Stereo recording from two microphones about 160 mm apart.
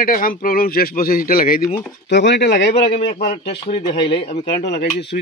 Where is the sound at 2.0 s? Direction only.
90° left.